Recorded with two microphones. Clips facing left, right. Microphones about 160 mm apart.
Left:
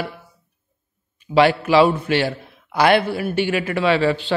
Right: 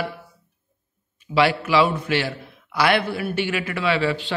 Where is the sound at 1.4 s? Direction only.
40° left (ahead or behind).